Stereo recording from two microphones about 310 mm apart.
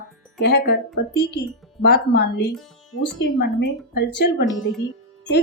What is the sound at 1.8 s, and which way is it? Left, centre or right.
A woman's voice, left.